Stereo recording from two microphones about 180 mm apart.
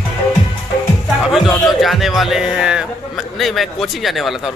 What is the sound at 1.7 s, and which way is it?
A man's voice, centre (ahead or behind).